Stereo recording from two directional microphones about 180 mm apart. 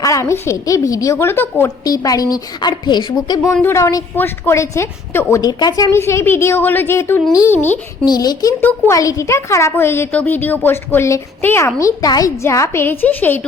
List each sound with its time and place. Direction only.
0.0 s a woman's voice: 15° left (ahead or behind)
8.0 s a woman's voice: 20° left (ahead or behind)